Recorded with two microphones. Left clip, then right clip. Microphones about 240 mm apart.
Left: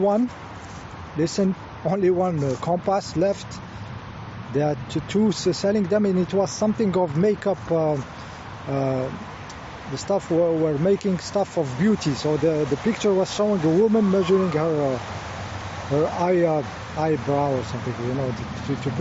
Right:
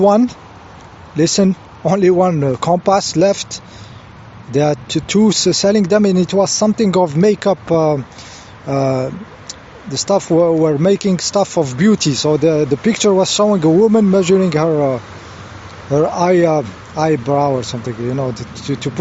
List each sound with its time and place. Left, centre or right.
1.2 s speech: right
16.0 s speech: right
18.7 s speech: right